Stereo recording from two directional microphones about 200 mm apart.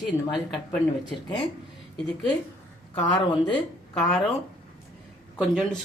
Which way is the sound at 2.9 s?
20° left (ahead or behind).